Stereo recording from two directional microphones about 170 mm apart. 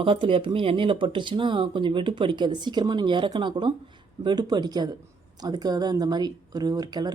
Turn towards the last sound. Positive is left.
turn(degrees=-25)  # may be behind; listen again after turning